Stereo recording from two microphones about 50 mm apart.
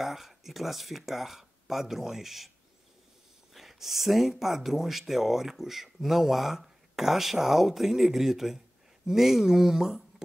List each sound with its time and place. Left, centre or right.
0.0 s speech: centre
3.5 s speech: centre